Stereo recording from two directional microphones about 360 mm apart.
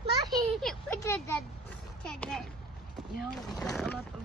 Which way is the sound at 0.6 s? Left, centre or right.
Centre.